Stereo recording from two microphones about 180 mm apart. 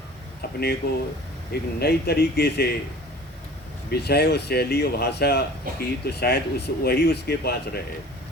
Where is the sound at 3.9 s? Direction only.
65° left (ahead or behind).